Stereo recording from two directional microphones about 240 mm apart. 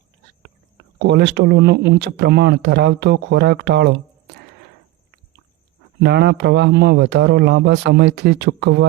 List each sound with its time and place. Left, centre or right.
0.9 s speech: right
6.0 s speech: right